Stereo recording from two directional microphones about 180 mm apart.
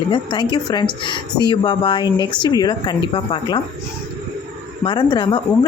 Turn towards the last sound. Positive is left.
turn(degrees=25)  # may be behind; listen again after turning